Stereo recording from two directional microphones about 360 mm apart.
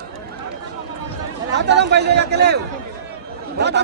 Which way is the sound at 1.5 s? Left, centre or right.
Right.